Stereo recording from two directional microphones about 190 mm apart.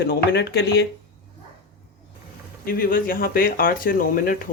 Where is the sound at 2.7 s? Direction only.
50° left (ahead or behind).